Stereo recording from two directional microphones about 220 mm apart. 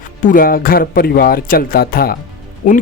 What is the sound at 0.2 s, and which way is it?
Speech, 40° left (ahead or behind).